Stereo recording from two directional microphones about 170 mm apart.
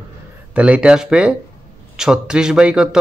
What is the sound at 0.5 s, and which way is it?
A man's voice, 5° right (ahead or behind).